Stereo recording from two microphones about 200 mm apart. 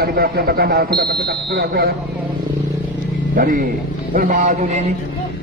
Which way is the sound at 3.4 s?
45° right (ahead or behind).